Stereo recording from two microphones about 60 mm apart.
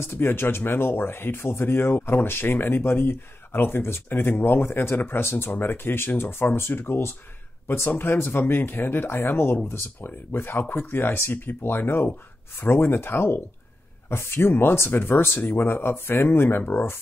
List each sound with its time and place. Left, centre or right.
0.0 s speech: left